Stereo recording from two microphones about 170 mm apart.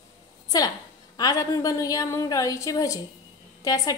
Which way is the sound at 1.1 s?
20° left (ahead or behind).